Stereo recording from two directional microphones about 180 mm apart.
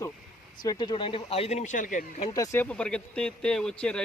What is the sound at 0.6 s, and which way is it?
Speech, 25° left (ahead or behind).